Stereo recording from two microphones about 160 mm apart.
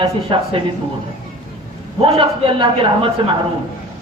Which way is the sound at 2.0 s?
30° right (ahead or behind).